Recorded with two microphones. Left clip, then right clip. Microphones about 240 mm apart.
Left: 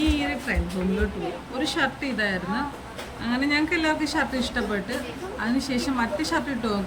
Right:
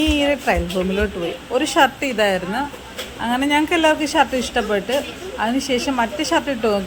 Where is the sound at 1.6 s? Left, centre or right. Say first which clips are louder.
Right 8 dB; centre.